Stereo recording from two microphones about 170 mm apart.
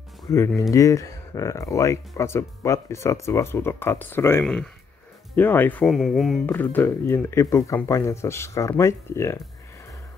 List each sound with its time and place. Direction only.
0.6 s speech: 20° left (ahead or behind)